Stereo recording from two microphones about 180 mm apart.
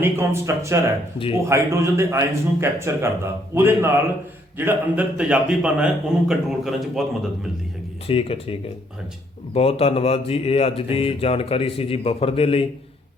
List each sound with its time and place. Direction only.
0.0 s a man's voice: 15° right (ahead or behind)
8.0 s speech: 30° left (ahead or behind)
9.6 s speech: 35° left (ahead or behind)